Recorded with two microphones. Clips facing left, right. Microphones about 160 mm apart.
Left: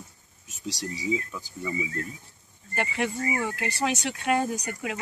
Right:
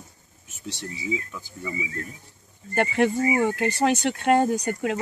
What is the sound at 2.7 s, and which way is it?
Speech, 45° right (ahead or behind).